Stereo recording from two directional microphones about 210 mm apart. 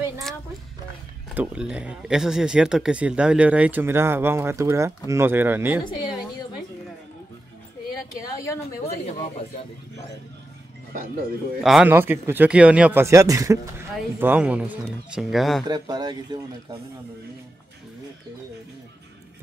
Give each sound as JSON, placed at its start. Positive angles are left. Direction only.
{"t": 1.3, "sound": "speech", "side_deg": -5}
{"t": 5.9, "sound": "a woman's voice", "side_deg": 20}
{"t": 8.4, "sound": "a woman's voice", "side_deg": 15}
{"t": 11.6, "sound": "speech", "side_deg": -5}
{"t": 15.7, "sound": "speech", "side_deg": -20}